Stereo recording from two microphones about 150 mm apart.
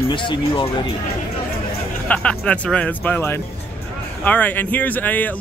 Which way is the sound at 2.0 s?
10° left (ahead or behind).